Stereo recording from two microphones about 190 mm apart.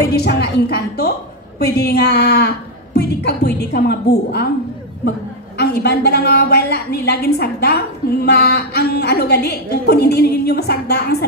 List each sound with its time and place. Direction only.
0.1 s a woman's voice: 60° left (ahead or behind)
5.6 s a woman's voice: 60° left (ahead or behind)